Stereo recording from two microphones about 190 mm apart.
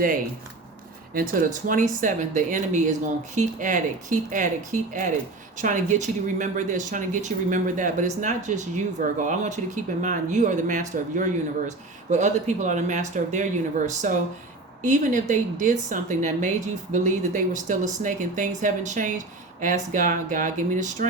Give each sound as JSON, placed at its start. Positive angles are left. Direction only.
{"t": 1.1, "sound": "speech", "side_deg": -45}